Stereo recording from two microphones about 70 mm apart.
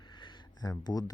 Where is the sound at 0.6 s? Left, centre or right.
Left.